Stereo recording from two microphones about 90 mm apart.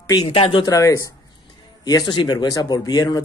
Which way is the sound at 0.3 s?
85° left.